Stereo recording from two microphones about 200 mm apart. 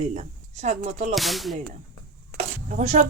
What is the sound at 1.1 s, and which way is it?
Pig, centre (ahead or behind).